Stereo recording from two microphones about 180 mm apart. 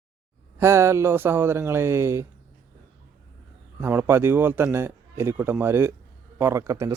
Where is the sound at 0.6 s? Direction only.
15° right (ahead or behind).